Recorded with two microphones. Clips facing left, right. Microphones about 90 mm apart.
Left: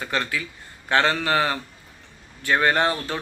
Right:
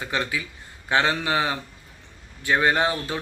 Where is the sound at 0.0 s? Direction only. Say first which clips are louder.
Left 1 dB; 15° right (ahead or behind).